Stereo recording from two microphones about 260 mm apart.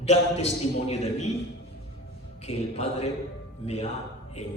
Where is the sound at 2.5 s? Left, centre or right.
Left.